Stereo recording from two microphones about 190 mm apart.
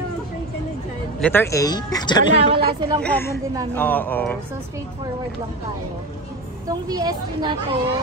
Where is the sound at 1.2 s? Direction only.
10° left (ahead or behind).